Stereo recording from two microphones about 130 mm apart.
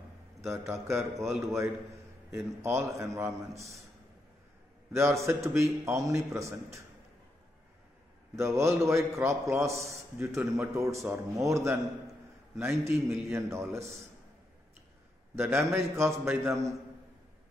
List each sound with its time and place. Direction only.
0.4 s a man's voice: 20° right (ahead or behind)
2.8 s a man's voice: 25° right (ahead or behind)
4.9 s a man's voice: 20° right (ahead or behind)
8.4 s a man's voice: 20° right (ahead or behind)
15.3 s a man's voice: 20° right (ahead or behind)